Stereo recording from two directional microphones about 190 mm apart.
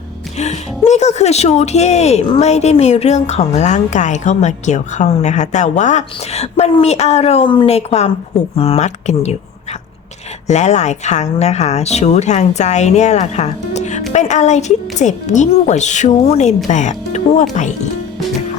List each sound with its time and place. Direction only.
0.3 s speech: 35° left (ahead or behind)
10.4 s speech: 35° left (ahead or behind)